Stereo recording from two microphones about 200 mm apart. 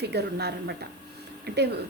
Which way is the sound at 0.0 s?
55° right (ahead or behind).